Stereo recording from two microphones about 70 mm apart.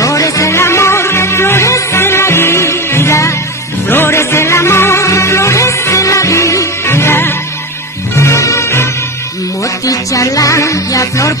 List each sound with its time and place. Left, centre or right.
0.0 s music: left
8.2 s music: left
9.8 s music: left